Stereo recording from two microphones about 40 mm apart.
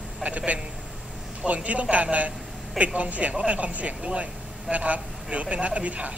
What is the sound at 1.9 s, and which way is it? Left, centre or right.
Speech, right.